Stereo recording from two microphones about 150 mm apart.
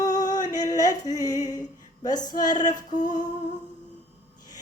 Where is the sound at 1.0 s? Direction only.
25° left (ahead or behind).